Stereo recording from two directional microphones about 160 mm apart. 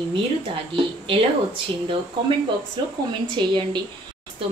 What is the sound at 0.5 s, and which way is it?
Speech, 35° right (ahead or behind).